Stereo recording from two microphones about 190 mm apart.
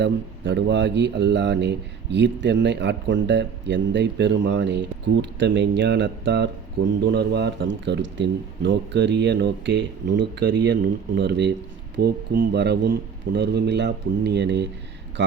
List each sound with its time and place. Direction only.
0.0 s speech: 65° right (ahead or behind)